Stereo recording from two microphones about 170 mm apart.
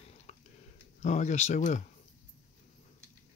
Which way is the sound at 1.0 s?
45° left (ahead or behind).